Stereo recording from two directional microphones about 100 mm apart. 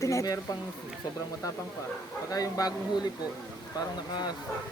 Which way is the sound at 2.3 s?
35° left (ahead or behind).